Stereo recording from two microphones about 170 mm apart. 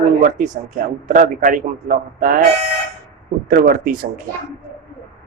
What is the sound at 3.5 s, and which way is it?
Speech, 55° right (ahead or behind).